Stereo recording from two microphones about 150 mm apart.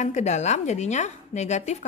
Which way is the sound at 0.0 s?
50° left (ahead or behind).